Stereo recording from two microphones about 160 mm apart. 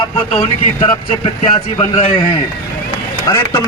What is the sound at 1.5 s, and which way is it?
Speech, 35° left (ahead or behind).